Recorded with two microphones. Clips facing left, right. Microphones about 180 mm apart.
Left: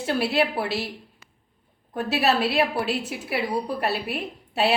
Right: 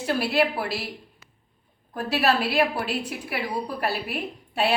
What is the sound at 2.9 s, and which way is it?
Speech, 25° left (ahead or behind).